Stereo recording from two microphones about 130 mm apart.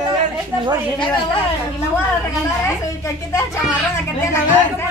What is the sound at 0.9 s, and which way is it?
Speech, 40° left (ahead or behind).